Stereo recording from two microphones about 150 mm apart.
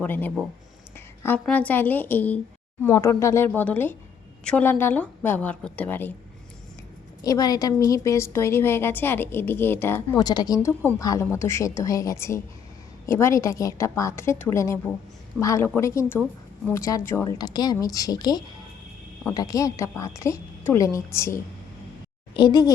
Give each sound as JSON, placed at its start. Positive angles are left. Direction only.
{"t": 0.0, "sound": "a woman's voice", "side_deg": 10}
{"t": 7.2, "sound": "a woman's voice", "side_deg": 25}
{"t": 10.2, "sound": "a woman's voice", "side_deg": 25}